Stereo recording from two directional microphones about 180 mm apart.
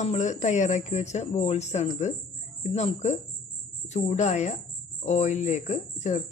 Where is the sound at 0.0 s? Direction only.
40° left (ahead or behind).